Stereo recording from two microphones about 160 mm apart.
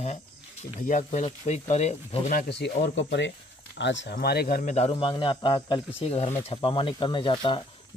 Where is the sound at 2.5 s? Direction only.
90° left; by 4.7 s 60° left (ahead or behind).